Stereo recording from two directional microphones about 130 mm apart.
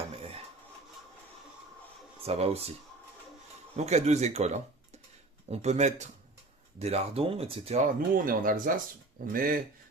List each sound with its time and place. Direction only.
2.2 s speech: 50° right (ahead or behind)
3.8 s speech: 60° right (ahead or behind)
7.8 s speech: 90° right